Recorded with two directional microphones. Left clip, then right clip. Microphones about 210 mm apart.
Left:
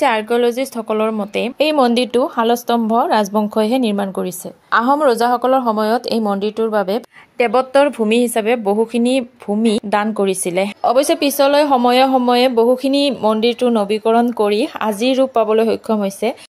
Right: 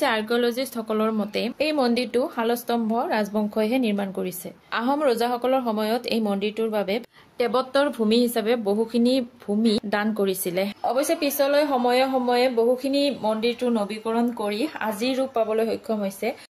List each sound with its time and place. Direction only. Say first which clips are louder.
0.0 s speech: left 8 dB; 20° left (ahead or behind)
1.6 s speech: left 9 dB; 35° left (ahead or behind)
10.8 s speech: left 10 dB; 40° left (ahead or behind)